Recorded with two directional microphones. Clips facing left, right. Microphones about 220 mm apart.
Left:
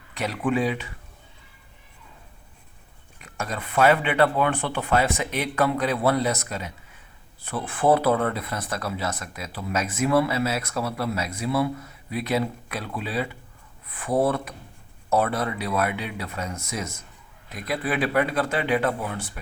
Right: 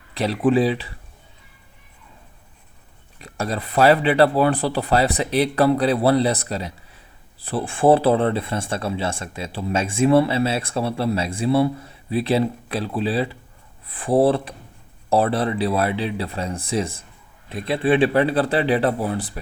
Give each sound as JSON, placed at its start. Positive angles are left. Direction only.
{"t": 0.1, "sound": "speech", "side_deg": -35}
{"t": 3.2, "sound": "speech", "side_deg": -35}